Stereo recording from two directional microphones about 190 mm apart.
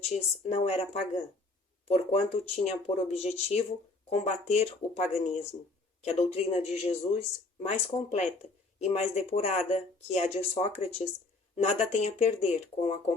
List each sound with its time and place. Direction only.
0.0 s speech: 35° left (ahead or behind)